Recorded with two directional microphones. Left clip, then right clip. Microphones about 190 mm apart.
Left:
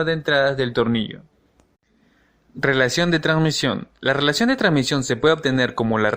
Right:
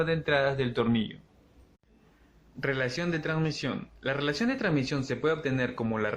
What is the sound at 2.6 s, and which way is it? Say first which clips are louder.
Speech: left 12 dB; 45° left (ahead or behind).